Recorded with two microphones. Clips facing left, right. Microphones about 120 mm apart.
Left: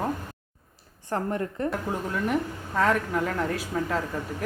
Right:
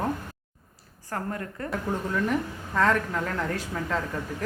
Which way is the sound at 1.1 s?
25° left (ahead or behind).